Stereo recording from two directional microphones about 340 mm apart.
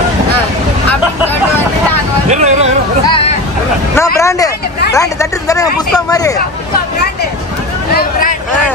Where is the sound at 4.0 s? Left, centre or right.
Centre.